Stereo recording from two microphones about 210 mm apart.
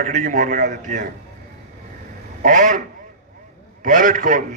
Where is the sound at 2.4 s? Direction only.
40° right (ahead or behind).